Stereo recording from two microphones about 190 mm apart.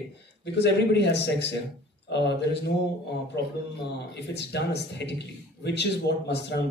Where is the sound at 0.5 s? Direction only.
65° left (ahead or behind).